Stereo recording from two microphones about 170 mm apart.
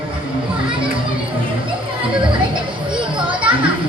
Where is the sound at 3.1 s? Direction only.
30° right (ahead or behind).